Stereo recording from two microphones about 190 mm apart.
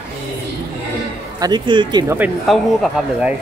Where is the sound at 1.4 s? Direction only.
25° right (ahead or behind).